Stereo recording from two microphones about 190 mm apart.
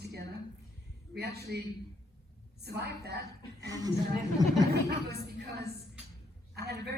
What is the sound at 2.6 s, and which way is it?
Speech, 60° right (ahead or behind).